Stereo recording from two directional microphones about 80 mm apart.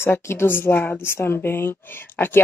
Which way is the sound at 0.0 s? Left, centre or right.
Left.